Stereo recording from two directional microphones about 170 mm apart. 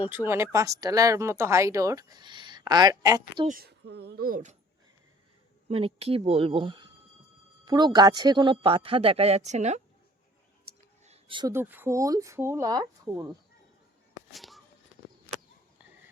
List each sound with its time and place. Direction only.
0.0 s speech: 10° right (ahead or behind)
3.4 s speech: 55° right (ahead or behind)
3.7 s speech: 80° right; by 4.5 s 55° right (ahead or behind)
5.6 s a woman's voice: 35° right (ahead or behind)
11.0 s a sound: 35° right (ahead or behind)
11.5 s speech: 10° right (ahead or behind)
14.3 s a sound: centre (ahead or behind)